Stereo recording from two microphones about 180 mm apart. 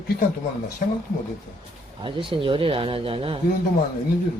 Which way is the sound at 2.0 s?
30° right (ahead or behind).